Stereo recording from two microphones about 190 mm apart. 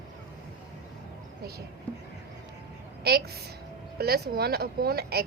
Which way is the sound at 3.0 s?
55° right (ahead or behind).